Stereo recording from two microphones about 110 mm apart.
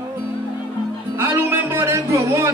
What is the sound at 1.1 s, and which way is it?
Music, 25° right (ahead or behind).